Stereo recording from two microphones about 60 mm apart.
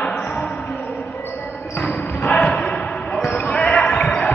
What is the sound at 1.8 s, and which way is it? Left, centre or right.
Basketball bounce, left.